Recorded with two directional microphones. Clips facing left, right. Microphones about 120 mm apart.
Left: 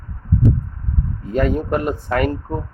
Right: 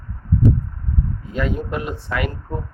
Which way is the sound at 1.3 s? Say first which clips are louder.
Left 6 dB; 50° left (ahead or behind).